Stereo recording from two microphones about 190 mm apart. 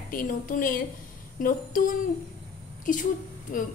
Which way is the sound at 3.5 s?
45° left (ahead or behind).